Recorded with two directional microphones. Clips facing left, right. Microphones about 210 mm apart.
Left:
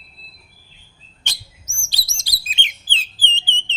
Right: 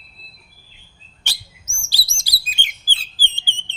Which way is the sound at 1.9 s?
20° left (ahead or behind).